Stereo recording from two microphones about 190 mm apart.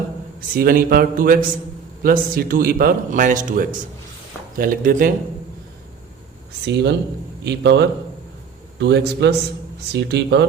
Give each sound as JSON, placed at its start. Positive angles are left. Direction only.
{"t": 0.5, "sound": "a man's voice", "side_deg": -50}
{"t": 6.7, "sound": "speech", "side_deg": -60}